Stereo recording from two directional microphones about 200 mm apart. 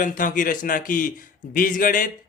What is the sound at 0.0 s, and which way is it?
Speech, 40° left (ahead or behind).